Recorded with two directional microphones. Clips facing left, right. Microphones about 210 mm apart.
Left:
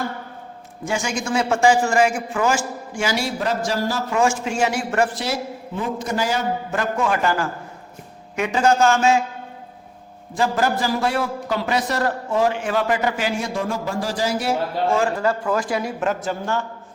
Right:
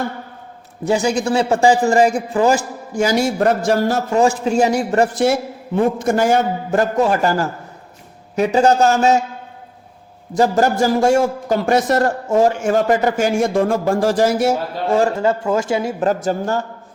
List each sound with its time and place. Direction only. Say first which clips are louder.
0.9 s a man's voice: right 7 dB; 35° right (ahead or behind); by 4.0 s 55° right (ahead or behind)
4.1 s a man's voice: right 5 dB; 35° right (ahead or behind)
5.2 s a man's voice: right 9 dB; 50° right (ahead or behind)
10.3 s a man's voice: right 6 dB; 45° right (ahead or behind)
15.1 s speech: right 4 dB; 25° right (ahead or behind); by 16.6 s 40° right (ahead or behind)